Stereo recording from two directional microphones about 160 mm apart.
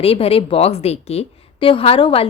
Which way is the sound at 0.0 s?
35° left (ahead or behind).